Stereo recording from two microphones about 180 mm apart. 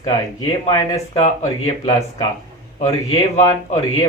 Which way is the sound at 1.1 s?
35° left (ahead or behind).